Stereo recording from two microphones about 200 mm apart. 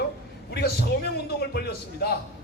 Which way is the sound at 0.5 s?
50° left (ahead or behind).